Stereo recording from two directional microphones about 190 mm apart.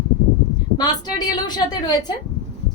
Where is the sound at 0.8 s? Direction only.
20° left (ahead or behind).